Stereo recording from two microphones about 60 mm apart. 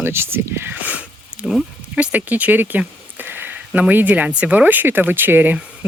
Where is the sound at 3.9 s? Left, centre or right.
Right.